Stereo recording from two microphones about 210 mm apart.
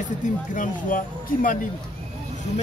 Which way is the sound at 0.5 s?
40° left (ahead or behind).